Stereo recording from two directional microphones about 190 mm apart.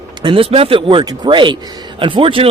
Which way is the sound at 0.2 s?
25° right (ahead or behind).